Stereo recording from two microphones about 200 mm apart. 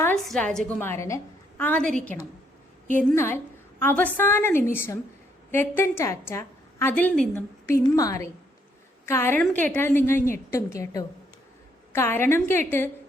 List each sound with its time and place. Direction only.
0.0 s a woman's voice: 5° left (ahead or behind)
3.2 s a woman's voice: 10° left (ahead or behind)